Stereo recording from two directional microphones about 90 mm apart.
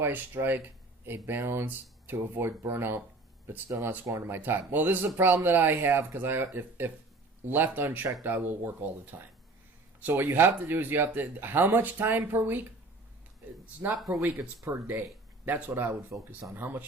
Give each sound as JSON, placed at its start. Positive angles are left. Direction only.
{"t": 0.0, "sound": "speech", "side_deg": -25}
{"t": 14.1, "sound": "speech", "side_deg": -15}